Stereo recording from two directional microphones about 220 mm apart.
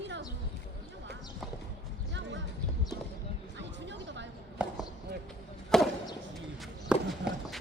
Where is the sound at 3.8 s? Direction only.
55° right (ahead or behind).